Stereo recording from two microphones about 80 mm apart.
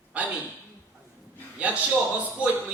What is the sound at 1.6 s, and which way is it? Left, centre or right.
Speech, centre.